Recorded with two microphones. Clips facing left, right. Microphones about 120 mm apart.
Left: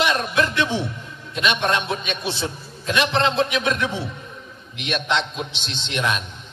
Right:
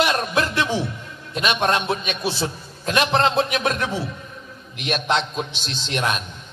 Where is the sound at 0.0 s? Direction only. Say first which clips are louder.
Even; 45° right (ahead or behind).